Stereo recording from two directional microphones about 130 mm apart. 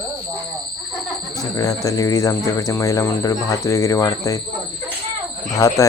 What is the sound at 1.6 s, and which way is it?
Speech, 25° left (ahead or behind).